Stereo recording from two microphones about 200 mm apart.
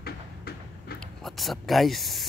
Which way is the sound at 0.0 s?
50° left (ahead or behind).